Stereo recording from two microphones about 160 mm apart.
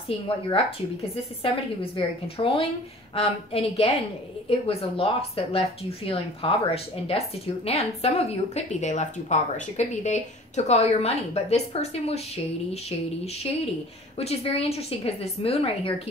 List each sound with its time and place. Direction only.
0.5 s speech: 35° left (ahead or behind)
14.1 s speech: 40° left (ahead or behind)